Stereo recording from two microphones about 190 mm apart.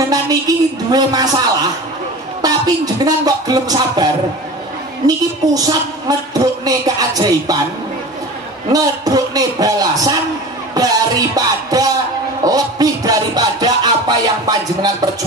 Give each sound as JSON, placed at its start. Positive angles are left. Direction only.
{"t": 0.5, "sound": "a woman's voice", "side_deg": -20}
{"t": 2.4, "sound": "a woman's voice", "side_deg": -20}
{"t": 8.7, "sound": "a woman's voice", "side_deg": -20}